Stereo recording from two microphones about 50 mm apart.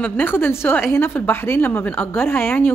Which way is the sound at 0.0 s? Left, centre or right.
Left.